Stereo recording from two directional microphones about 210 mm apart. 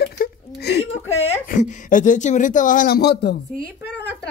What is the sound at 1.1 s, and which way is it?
Speech, 35° left (ahead or behind).